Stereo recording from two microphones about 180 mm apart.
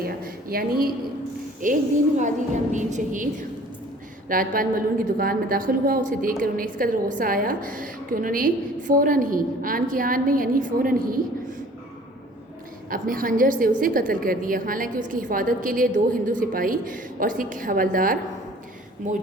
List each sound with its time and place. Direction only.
0.5 s a woman's voice: 55° right (ahead or behind)
1.6 s a woman's voice: 45° right (ahead or behind)
4.3 s a woman's voice: 50° right (ahead or behind)
12.9 s a woman's voice: 50° right (ahead or behind)